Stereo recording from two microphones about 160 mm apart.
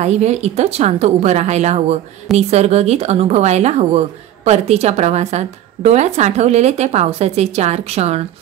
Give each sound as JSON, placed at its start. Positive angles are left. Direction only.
{"t": 0.0, "sound": "a woman's voice", "side_deg": -45}